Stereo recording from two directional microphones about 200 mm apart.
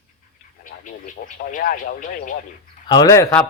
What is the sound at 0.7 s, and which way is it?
Speech, 40° left (ahead or behind).